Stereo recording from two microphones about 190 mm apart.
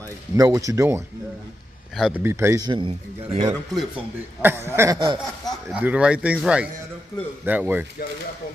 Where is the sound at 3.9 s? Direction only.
10° right (ahead or behind).